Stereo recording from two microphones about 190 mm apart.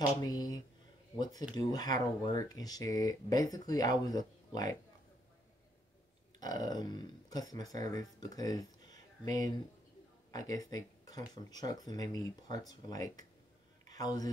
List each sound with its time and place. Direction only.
0.2 s speech: 20° left (ahead or behind)
6.4 s a man's voice: 20° left (ahead or behind)